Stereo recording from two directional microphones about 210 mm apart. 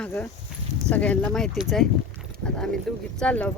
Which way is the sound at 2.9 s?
Centre (ahead or behind).